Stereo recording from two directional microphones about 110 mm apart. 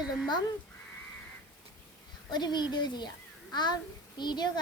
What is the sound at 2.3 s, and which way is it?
A child's voice, 40° left (ahead or behind).